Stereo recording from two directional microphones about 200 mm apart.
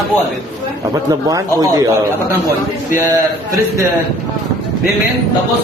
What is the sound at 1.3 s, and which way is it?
Speech, 15° right (ahead or behind).